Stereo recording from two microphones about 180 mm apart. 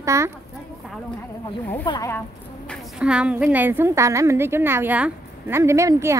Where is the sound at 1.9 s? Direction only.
15° left (ahead or behind).